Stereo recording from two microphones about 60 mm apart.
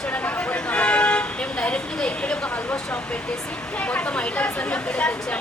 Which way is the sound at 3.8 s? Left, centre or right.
Left.